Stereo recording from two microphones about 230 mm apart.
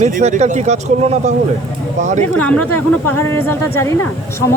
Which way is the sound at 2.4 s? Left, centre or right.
Centre.